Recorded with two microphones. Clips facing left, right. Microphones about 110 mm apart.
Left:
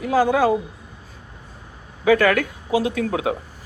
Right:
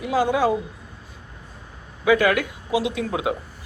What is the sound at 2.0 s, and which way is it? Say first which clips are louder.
A man's voice: left 2 dB; 50° left (ahead or behind).